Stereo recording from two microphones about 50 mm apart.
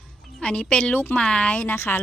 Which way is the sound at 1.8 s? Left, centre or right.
Left.